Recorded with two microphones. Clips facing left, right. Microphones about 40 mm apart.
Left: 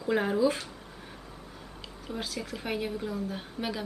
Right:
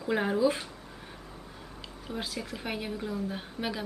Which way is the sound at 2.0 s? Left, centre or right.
Centre.